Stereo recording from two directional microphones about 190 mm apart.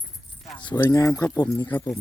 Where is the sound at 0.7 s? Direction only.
20° left (ahead or behind).